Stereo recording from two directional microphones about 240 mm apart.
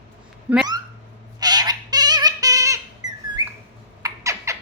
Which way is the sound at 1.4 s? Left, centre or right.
Centre.